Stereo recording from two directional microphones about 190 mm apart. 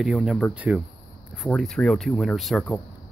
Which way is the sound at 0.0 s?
Centre (ahead or behind).